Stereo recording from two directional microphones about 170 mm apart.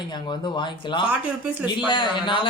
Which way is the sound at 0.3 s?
30° left (ahead or behind).